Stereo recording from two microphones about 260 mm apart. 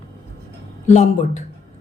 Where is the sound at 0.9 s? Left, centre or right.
Left.